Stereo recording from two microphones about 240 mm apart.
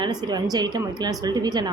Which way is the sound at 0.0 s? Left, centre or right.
Centre.